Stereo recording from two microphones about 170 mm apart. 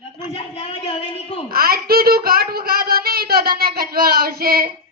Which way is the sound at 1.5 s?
60° right (ahead or behind).